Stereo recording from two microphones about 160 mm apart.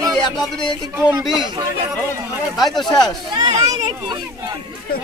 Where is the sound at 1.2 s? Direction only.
25° left (ahead or behind).